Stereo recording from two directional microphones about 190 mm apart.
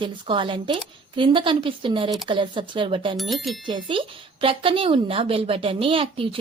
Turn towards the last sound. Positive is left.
turn(degrees=-30)  # may be behind; listen again after turning